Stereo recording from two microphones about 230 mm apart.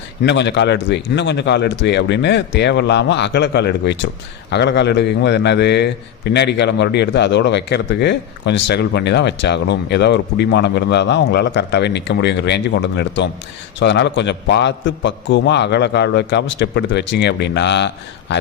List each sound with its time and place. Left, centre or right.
0.3 s a man's voice: left